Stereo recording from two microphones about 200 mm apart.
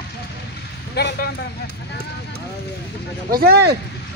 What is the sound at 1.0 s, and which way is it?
Speech, 50° left (ahead or behind).